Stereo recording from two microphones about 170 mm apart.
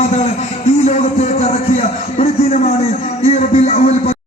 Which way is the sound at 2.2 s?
45° left (ahead or behind).